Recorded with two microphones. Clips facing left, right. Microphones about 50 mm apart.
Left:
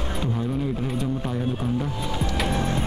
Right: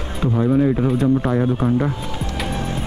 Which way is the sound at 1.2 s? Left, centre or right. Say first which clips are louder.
Right 8 dB; right.